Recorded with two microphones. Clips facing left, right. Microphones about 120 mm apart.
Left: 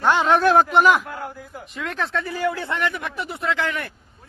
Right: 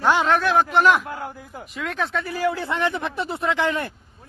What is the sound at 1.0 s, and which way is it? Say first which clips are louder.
Speech: right 1 dB; 20° right (ahead or behind).